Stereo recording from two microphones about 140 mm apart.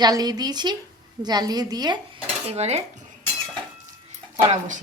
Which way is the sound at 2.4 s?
50° right (ahead or behind).